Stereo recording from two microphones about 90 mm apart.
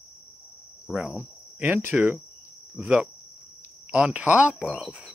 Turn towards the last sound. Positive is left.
turn(degrees=-15)  # may be behind; listen again after turning